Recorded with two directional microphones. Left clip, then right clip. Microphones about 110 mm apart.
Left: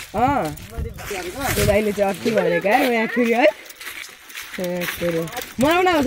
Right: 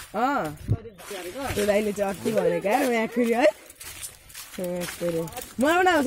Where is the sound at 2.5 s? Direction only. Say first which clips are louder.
Left 6 dB; 15° right (ahead or behind).